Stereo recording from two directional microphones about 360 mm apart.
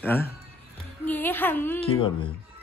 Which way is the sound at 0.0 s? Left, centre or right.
Centre.